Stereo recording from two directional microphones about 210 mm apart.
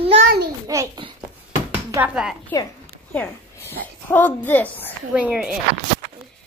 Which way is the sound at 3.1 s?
5° left (ahead or behind).